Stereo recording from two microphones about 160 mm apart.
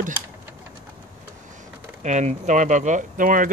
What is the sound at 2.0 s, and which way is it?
Speech, 50° right (ahead or behind).